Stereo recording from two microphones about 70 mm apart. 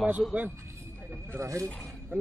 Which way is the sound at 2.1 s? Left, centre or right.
Right.